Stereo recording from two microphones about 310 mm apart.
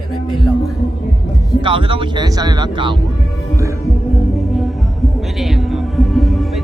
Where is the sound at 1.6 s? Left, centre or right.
Centre.